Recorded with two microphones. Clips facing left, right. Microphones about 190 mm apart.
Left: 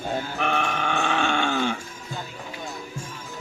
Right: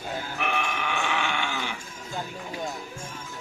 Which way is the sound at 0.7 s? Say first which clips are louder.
Left 4 dB; 50° left (ahead or behind).